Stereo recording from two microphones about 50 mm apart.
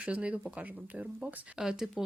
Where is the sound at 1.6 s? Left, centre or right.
Centre.